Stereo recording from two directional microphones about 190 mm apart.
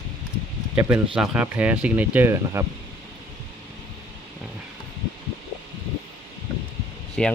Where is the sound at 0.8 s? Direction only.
5° right (ahead or behind).